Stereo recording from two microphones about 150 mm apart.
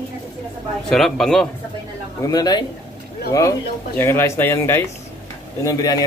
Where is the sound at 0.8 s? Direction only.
Centre (ahead or behind).